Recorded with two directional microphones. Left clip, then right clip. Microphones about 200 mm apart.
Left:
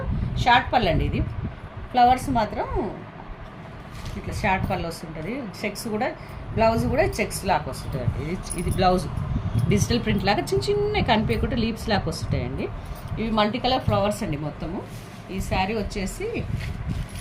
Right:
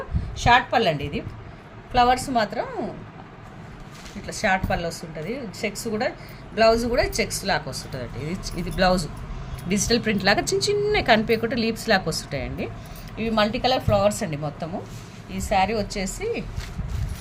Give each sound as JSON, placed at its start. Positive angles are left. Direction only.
{"t": 0.3, "sound": "a woman's voice", "side_deg": -60}
{"t": 4.3, "sound": "a woman's voice", "side_deg": -60}
{"t": 8.8, "sound": "a woman's voice", "side_deg": -70}